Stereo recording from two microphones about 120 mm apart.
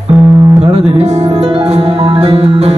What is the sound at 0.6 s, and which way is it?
Music, 60° right (ahead or behind).